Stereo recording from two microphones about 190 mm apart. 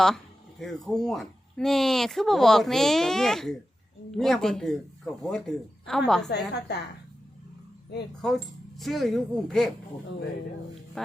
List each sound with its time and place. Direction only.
0.9 s speech: centre (ahead or behind)
6.2 s a woman's voice: 60° left (ahead or behind)
8.2 s speech: centre (ahead or behind)
11.0 s speech: centre (ahead or behind)